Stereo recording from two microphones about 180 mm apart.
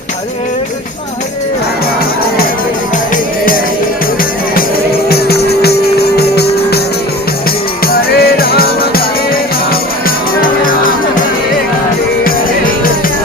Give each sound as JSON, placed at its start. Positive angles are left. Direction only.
{"t": 5.0, "sound": "music", "side_deg": 60}
{"t": 8.2, "sound": "music", "side_deg": 60}